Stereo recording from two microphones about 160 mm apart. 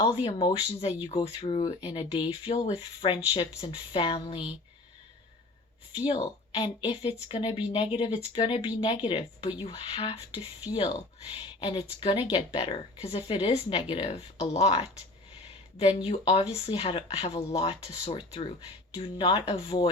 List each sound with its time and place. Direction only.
0.2 s speech: 30° left (ahead or behind)
6.1 s speech: 30° left (ahead or behind)